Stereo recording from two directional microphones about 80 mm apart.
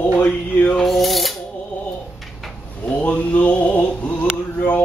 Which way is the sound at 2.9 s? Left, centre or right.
Centre.